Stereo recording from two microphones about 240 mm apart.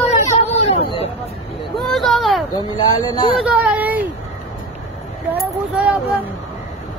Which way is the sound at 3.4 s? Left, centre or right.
Centre.